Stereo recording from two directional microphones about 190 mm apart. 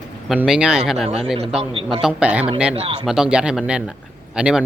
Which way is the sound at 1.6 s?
30° right (ahead or behind).